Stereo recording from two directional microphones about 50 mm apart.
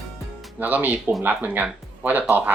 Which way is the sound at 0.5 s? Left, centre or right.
Right.